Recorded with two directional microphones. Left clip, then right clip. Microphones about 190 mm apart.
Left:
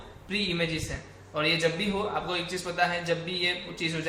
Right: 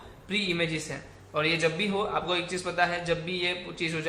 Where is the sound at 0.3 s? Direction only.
25° right (ahead or behind).